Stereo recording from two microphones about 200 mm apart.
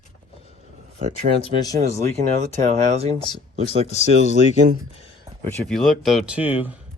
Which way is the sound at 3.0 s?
30° right (ahead or behind).